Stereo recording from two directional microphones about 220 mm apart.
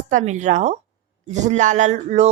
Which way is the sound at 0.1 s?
35° right (ahead or behind).